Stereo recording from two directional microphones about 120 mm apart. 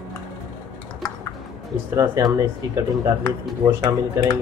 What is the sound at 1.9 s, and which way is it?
Speech, 25° right (ahead or behind).